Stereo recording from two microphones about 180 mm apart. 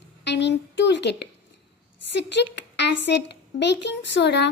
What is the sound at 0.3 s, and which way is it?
Speech, 75° left (ahead or behind).